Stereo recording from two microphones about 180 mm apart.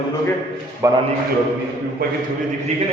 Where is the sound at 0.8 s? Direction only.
15° right (ahead or behind).